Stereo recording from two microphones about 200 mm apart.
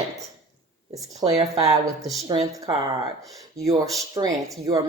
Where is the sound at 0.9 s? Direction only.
15° right (ahead or behind).